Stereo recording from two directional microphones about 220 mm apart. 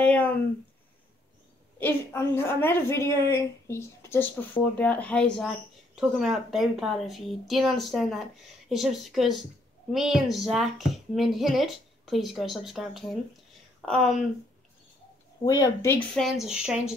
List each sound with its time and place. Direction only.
0.0 s speech: 5° left (ahead or behind)
1.8 s a woman's voice: 10° left (ahead or behind)
15.4 s speech: 15° left (ahead or behind)
16.2 s a woman's voice: centre (ahead or behind)